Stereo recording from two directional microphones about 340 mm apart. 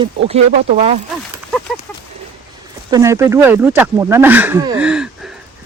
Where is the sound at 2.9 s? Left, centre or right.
Centre.